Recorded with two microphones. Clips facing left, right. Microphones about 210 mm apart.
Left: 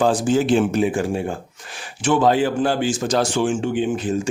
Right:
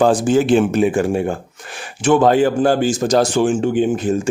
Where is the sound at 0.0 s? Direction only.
55° right (ahead or behind).